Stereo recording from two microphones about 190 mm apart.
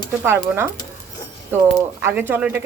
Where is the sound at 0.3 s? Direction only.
10° right (ahead or behind).